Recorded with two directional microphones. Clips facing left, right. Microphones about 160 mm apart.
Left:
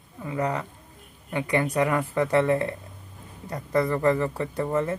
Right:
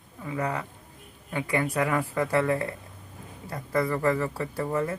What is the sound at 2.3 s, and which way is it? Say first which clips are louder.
Speech: left 3 dB; 25° left (ahead or behind).